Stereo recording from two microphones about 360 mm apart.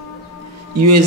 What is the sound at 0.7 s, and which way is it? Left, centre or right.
Speech, right.